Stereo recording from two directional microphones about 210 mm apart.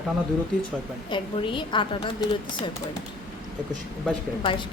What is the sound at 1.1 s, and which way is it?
A woman's voice, 25° left (ahead or behind).